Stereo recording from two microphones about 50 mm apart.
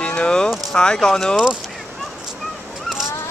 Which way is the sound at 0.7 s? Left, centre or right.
Centre.